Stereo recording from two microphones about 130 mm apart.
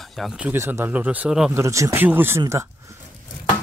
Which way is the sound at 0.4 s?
15° right (ahead or behind).